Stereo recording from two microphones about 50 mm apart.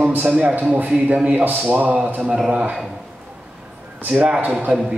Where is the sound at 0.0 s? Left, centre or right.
Right.